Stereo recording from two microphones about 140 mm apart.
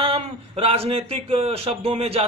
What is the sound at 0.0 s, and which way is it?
A man's voice, 45° right (ahead or behind).